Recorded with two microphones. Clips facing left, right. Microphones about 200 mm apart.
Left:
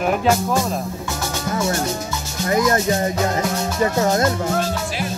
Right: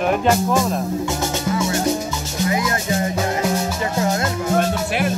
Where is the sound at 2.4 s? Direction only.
45° left (ahead or behind).